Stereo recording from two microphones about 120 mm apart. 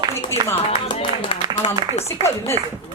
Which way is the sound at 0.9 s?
45° left (ahead or behind).